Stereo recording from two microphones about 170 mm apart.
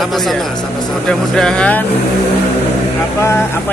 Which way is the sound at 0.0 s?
Centre (ahead or behind).